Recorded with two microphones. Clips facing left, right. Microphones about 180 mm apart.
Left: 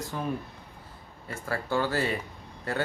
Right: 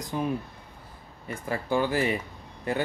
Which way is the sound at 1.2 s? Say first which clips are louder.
Right 2 dB; 15° right (ahead or behind).